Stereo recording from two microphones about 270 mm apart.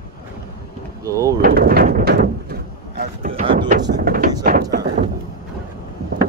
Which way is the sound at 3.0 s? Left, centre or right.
Right.